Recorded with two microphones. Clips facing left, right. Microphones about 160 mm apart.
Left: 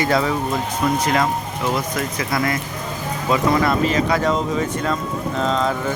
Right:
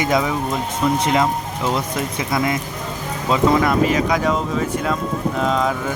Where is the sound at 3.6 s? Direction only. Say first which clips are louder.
Right 1 dB; 10° right (ahead or behind).